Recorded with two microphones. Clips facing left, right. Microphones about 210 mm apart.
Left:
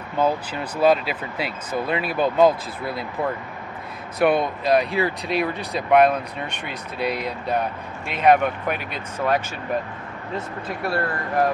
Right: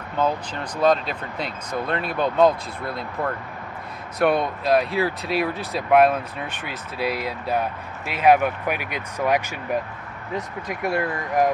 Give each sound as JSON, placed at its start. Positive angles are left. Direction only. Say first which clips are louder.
{"t": 0.2, "sound": "speech", "louder": "left 2 dB", "side_deg": 5}